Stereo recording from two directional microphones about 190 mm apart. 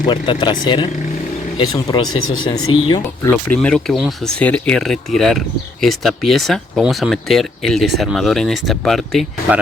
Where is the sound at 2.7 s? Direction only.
25° left (ahead or behind).